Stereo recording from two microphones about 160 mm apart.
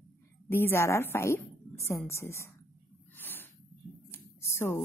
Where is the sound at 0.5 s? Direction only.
15° left (ahead or behind).